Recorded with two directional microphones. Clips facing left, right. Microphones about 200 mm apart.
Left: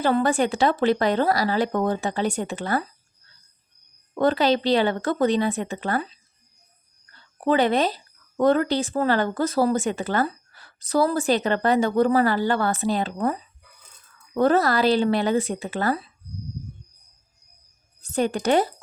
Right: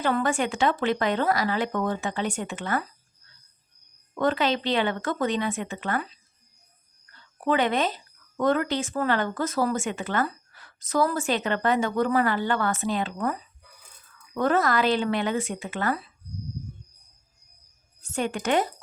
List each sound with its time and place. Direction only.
0.0 s speech: 35° left (ahead or behind)
4.1 s speech: 35° left (ahead or behind)
7.1 s speech: 35° left (ahead or behind)
18.0 s speech: 35° left (ahead or behind)